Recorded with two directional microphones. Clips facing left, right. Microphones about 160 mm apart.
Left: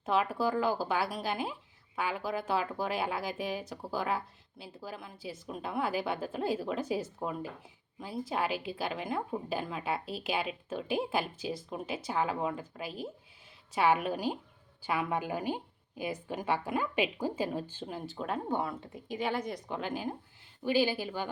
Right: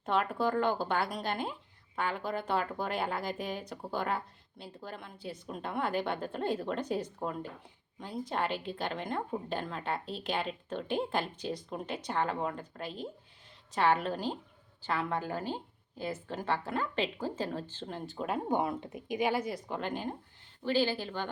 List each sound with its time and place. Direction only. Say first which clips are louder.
0.0 s a woman's voice: left 1 dB; 5° left (ahead or behind)
18.4 s a woman's voice: right 2 dB; 15° right (ahead or behind); by 21.2 s 10° left (ahead or behind)